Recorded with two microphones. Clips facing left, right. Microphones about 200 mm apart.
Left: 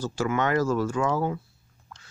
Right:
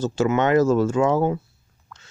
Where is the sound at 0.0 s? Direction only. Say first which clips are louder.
Right 6 dB; 25° right (ahead or behind).